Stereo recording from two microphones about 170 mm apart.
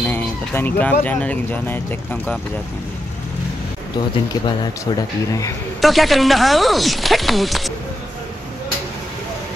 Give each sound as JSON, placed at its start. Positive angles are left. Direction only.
{"t": 0.0, "sound": "a sound", "side_deg": 10}
{"t": 1.0, "sound": "speech", "side_deg": 10}
{"t": 4.9, "sound": "speech", "side_deg": 20}
{"t": 5.8, "sound": "speech", "side_deg": 0}